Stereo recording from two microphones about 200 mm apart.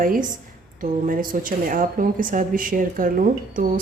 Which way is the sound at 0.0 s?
45° right (ahead or behind).